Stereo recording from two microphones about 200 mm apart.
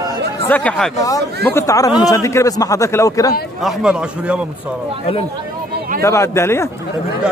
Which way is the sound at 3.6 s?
5° right (ahead or behind).